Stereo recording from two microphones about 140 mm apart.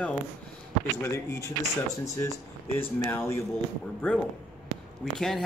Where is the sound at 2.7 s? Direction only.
15° left (ahead or behind).